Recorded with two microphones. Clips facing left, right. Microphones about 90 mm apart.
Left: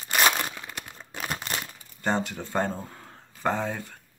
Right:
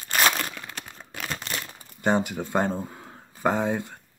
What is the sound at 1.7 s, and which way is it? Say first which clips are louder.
Speech: right 5 dB; 15° right (ahead or behind).